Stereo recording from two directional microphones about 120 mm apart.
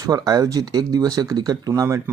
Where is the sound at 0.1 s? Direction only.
30° right (ahead or behind).